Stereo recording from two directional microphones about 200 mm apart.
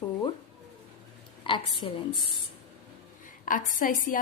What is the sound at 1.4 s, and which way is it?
Speech, 25° left (ahead or behind).